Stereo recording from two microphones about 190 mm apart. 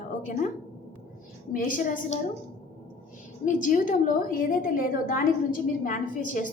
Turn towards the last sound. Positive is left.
turn(degrees=45)  # may be behind; listen again after turning